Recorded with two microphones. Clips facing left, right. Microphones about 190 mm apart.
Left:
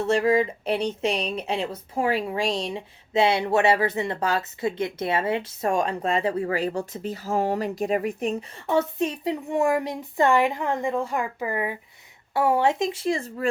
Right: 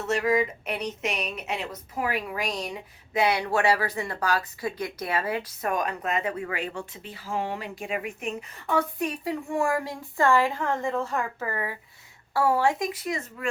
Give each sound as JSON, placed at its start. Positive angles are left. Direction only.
{"t": 0.0, "sound": "speech", "side_deg": 30}